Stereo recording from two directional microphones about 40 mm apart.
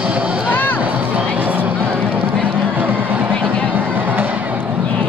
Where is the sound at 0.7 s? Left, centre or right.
Right.